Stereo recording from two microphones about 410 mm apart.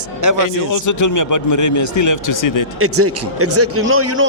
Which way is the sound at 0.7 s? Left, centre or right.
Left.